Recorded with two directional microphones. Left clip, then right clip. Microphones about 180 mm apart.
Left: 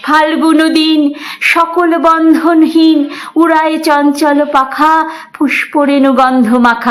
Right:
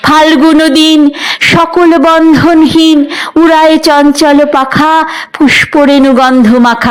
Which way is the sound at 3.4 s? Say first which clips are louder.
Right 5 dB; 30° right (ahead or behind).